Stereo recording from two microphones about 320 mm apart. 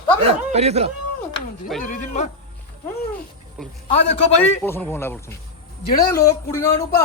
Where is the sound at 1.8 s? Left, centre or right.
Left.